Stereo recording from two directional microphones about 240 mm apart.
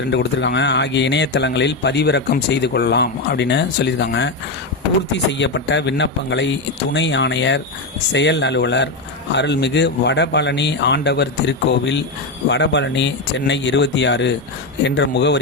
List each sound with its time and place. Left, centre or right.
0.1 s speech: left